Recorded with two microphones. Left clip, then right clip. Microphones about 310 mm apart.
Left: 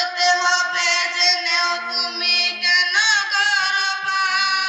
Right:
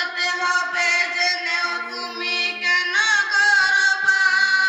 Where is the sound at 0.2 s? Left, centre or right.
Centre.